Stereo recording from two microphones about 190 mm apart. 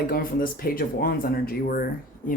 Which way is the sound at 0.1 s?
50° left (ahead or behind).